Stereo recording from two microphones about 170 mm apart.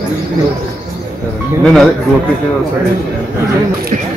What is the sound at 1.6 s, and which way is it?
Speech, centre (ahead or behind).